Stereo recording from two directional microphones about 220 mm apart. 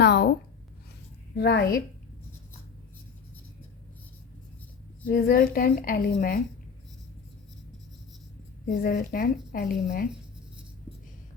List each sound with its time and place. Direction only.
0.0 s a woman's voice: 50° left (ahead or behind)
1.4 s a woman's voice: 45° left (ahead or behind)
5.0 s a woman's voice: 40° left (ahead or behind)
8.6 s a woman's voice: 45° left (ahead or behind)